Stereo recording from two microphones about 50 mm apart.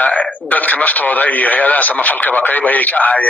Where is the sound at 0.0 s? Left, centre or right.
Left.